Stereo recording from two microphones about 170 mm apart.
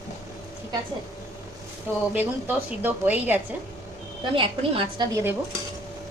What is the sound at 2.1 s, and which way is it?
A woman's voice, 10° right (ahead or behind).